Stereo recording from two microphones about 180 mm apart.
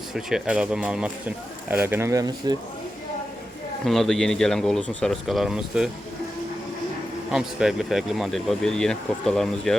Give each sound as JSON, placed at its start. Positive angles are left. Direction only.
{"t": 0.1, "sound": "speech", "side_deg": -5}
{"t": 3.8, "sound": "speech", "side_deg": 0}
{"t": 7.3, "sound": "speech", "side_deg": -5}